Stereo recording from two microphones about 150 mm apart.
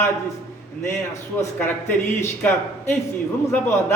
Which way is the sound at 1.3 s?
15° left (ahead or behind).